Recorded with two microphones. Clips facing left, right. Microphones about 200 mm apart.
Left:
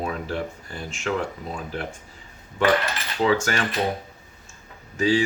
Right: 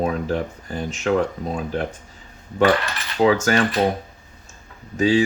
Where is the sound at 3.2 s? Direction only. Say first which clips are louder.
Right 5 dB; 40° right (ahead or behind).